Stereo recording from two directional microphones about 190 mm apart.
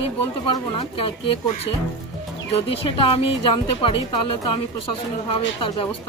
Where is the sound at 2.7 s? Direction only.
25° left (ahead or behind).